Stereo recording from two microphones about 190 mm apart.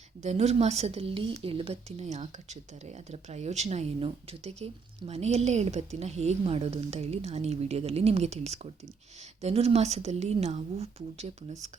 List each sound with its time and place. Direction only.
0.2 s a woman's voice: 35° right (ahead or behind)